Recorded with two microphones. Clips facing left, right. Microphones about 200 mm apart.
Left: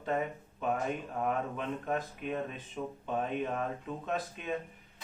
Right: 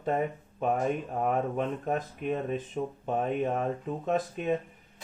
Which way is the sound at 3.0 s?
45° right (ahead or behind).